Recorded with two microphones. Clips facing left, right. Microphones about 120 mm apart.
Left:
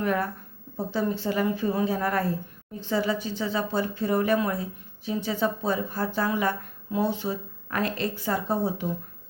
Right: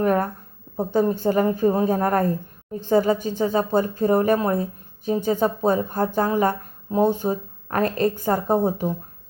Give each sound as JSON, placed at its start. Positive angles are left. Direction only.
{"t": 0.0, "sound": "a woman's voice", "side_deg": -45}